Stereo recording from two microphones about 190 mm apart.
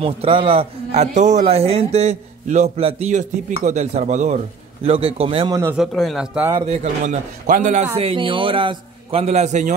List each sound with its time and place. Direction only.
0.0 s a man's voice: 30° right (ahead or behind)
5.8 s speech: centre (ahead or behind)
6.6 s a man's voice: 35° right (ahead or behind)